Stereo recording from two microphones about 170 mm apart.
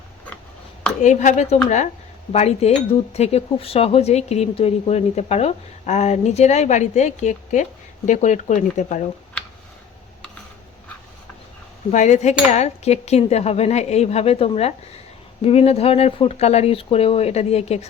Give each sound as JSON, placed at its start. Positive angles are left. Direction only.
{"t": 1.0, "sound": "speech", "side_deg": 45}
{"t": 11.9, "sound": "speech", "side_deg": 45}